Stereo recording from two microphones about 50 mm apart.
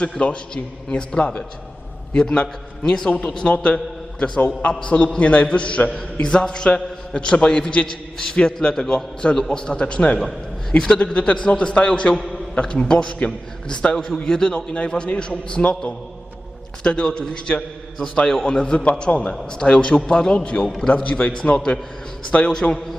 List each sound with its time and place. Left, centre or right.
0.0 s a man's voice: left
2.9 s a man's voice: centre
10.2 s a man's voice: centre
11.0 s a man's voice: left
20.7 s a man's voice: centre
20.9 s a man's voice: left